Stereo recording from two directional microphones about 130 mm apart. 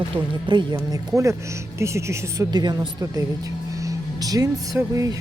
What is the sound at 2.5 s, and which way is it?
Speech, 35° right (ahead or behind).